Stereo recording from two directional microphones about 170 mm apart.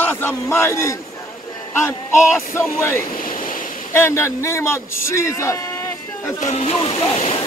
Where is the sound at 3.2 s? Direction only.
55° left (ahead or behind).